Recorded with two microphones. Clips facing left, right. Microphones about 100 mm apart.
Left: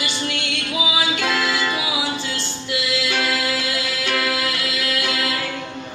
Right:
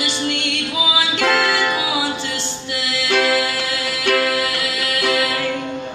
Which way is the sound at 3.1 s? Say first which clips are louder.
Right 9 dB; 65° right (ahead or behind).